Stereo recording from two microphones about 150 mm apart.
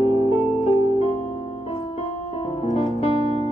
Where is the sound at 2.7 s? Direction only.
45° left (ahead or behind).